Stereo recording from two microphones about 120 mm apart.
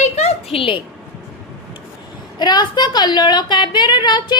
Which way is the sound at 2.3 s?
35° left (ahead or behind).